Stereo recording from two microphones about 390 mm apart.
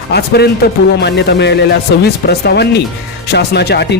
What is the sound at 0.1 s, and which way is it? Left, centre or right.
Speech, left.